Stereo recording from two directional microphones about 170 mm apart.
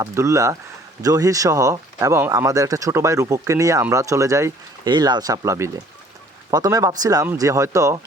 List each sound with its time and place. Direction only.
0.0 s speech: 20° right (ahead or behind)